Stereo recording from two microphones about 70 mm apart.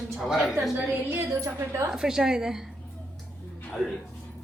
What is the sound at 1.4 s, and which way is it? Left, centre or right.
Speech, right.